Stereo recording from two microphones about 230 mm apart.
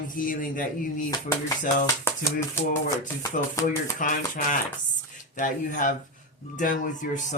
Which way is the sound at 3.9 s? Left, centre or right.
Left.